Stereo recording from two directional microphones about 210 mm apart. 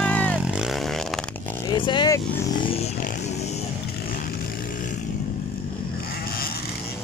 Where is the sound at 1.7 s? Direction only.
20° left (ahead or behind).